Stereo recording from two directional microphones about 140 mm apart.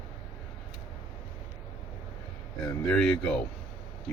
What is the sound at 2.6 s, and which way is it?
Speech, 5° left (ahead or behind).